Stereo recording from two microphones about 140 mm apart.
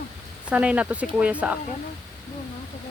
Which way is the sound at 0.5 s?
10° right (ahead or behind).